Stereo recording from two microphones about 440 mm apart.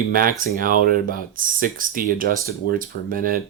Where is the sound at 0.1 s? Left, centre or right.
Centre.